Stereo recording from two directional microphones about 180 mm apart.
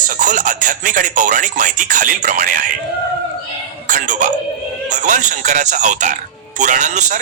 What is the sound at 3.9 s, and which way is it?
Music, 45° right (ahead or behind).